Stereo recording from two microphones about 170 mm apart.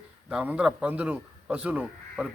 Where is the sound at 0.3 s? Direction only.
5° right (ahead or behind).